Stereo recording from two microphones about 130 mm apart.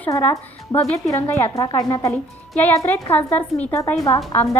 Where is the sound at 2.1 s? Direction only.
10° left (ahead or behind).